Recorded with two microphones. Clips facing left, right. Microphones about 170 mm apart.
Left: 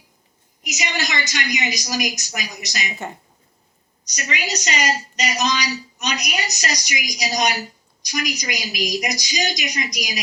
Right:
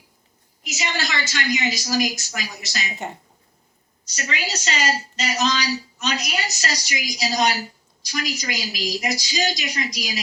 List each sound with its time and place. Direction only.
0.6 s a woman's voice: 15° left (ahead or behind)
4.0 s a woman's voice: 15° left (ahead or behind)